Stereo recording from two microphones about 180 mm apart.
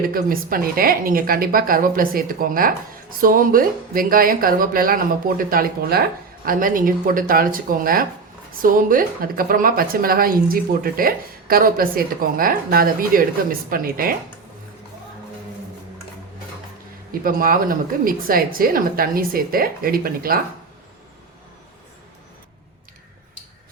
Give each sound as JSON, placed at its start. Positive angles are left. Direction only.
{"t": 0.1, "sound": "speech", "side_deg": -55}
{"t": 17.1, "sound": "speech", "side_deg": -50}